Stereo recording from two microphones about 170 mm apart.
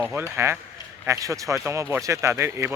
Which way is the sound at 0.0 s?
5° right (ahead or behind).